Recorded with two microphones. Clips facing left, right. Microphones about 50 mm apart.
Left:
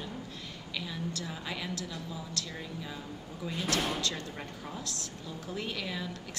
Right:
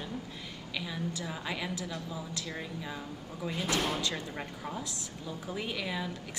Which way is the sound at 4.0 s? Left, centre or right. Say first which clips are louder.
Right 1 dB; centre.